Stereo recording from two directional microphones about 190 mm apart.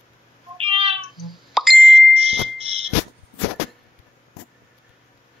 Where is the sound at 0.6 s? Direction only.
30° right (ahead or behind).